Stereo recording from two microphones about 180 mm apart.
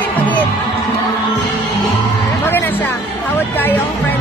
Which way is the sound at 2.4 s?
10° left (ahead or behind).